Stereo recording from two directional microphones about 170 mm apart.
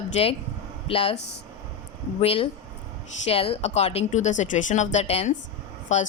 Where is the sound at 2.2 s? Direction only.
35° left (ahead or behind).